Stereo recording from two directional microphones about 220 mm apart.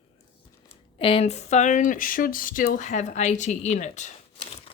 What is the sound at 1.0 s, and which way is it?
Speech, 25° left (ahead or behind).